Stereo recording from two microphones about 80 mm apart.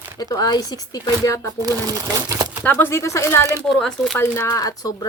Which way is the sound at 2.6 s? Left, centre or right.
Left.